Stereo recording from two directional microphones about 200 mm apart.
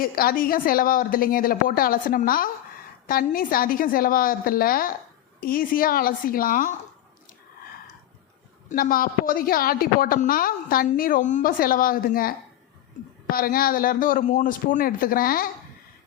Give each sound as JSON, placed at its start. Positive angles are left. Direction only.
{"t": 0.0, "sound": "a woman's voice", "side_deg": 45}
{"t": 8.7, "sound": "a woman's voice", "side_deg": 45}
{"t": 13.3, "sound": "a woman's voice", "side_deg": 45}